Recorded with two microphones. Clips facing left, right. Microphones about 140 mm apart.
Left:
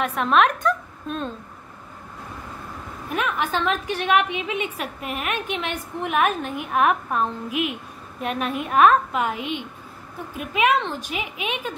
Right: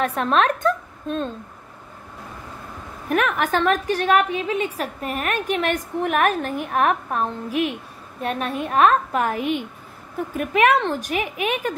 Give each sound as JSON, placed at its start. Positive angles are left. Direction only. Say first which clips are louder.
{"t": 0.0, "sound": "a woman's voice", "louder": "even", "side_deg": -35}
{"t": 3.1, "sound": "a woman's voice", "louder": "right 4 dB", "side_deg": -55}